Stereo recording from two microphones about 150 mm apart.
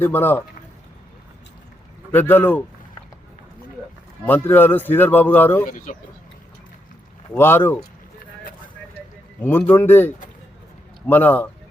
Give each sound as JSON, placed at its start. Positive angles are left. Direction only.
{"t": 0.0, "sound": "a man's voice", "side_deg": 15}
{"t": 2.1, "sound": "a man's voice", "side_deg": 15}
{"t": 4.3, "sound": "a man's voice", "side_deg": 10}
{"t": 5.6, "sound": "speech", "side_deg": 65}
{"t": 7.3, "sound": "a man's voice", "side_deg": 15}
{"t": 9.4, "sound": "a man's voice", "side_deg": 15}